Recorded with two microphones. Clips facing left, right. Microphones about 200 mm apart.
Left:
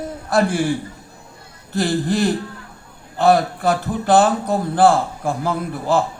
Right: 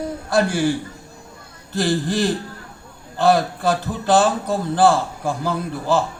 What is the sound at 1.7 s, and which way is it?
Speech, 60° left (ahead or behind).